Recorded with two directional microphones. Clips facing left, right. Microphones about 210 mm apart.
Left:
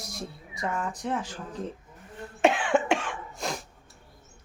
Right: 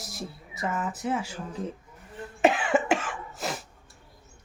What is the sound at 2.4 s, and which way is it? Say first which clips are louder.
Cough: even; centre (ahead or behind).